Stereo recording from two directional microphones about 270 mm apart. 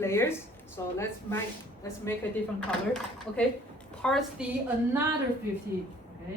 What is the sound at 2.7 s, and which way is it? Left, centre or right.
A woman's voice, centre.